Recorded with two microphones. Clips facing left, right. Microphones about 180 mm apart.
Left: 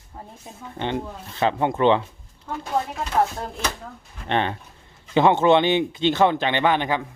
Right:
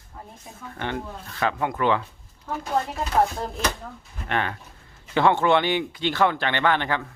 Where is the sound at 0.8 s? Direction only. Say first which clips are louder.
Left 4 dB; 20° left (ahead or behind).